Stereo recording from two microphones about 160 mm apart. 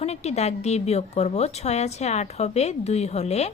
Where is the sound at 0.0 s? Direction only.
40° left (ahead or behind).